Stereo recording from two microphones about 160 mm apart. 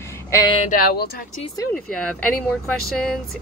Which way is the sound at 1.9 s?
5° left (ahead or behind).